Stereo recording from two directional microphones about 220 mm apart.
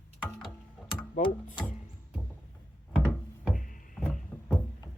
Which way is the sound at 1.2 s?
35° left (ahead or behind).